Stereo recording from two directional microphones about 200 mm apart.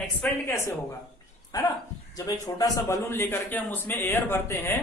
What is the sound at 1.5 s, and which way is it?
A man's voice, 20° left (ahead or behind).